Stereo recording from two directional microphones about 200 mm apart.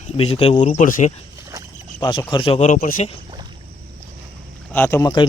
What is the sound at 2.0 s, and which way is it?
Speech, 25° left (ahead or behind).